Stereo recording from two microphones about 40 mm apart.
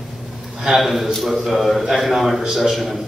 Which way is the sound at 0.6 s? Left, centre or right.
Centre.